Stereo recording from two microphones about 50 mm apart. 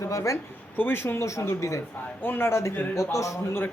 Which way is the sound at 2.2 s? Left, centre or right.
Left.